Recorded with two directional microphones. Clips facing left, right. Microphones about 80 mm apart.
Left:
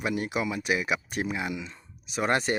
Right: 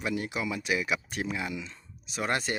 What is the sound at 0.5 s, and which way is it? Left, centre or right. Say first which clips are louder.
Speech: left 2 dB; left.